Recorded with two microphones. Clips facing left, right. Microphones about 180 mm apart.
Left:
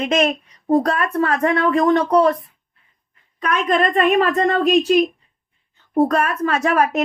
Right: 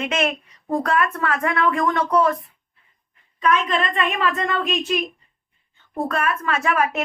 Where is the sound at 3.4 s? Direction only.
50° left (ahead or behind).